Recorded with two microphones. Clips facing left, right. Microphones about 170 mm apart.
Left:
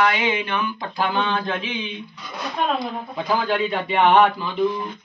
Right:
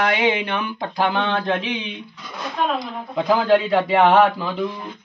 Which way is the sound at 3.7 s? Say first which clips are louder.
Right 2 dB; 90° right.